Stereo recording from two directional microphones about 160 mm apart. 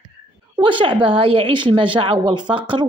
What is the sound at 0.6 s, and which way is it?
Speech, 30° right (ahead or behind).